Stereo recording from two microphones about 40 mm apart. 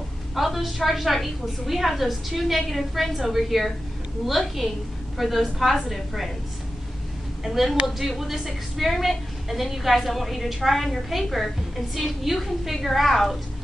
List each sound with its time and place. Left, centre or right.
0.3 s a woman's voice: centre
7.4 s a woman's voice: centre